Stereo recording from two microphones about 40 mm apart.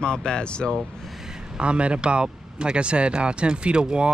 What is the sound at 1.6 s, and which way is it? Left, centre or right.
Speech, right.